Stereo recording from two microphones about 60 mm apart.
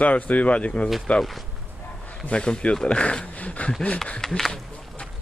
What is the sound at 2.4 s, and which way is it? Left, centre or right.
Speech, centre.